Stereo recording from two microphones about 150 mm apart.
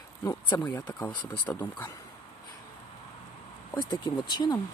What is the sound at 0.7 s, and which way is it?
Speech, 25° left (ahead or behind).